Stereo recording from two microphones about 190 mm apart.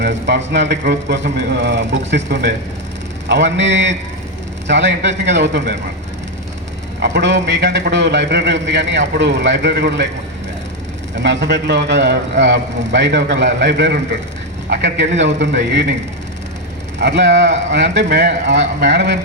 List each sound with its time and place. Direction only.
0.0 s a man's voice: 70° right (ahead or behind)
7.0 s a man's voice: 70° right (ahead or behind)
11.1 s a man's voice: 65° right (ahead or behind)
17.0 s a man's voice: 65° right (ahead or behind)